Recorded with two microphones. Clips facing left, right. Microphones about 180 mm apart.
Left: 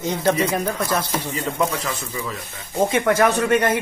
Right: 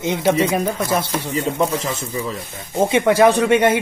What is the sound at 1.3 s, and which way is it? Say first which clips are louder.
Speech: right 5 dB; 35° right (ahead or behind).